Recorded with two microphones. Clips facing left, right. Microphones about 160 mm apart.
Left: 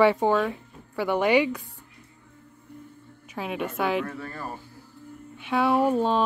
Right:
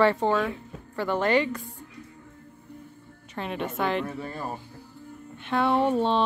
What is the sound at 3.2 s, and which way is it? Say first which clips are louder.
Speech: left 1 dB; 5° left (ahead or behind).